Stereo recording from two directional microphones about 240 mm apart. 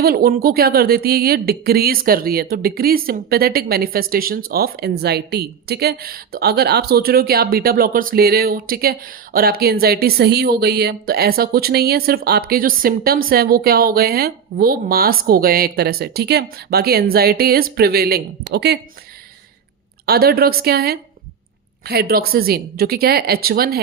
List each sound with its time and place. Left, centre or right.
0.0 s a woman's voice: right
20.1 s a woman's voice: right